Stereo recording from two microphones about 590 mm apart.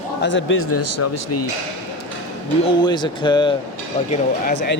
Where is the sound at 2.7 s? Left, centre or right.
Centre.